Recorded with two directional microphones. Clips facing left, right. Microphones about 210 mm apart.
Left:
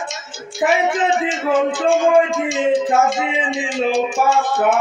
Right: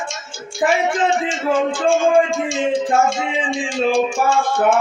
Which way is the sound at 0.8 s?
5° left (ahead or behind).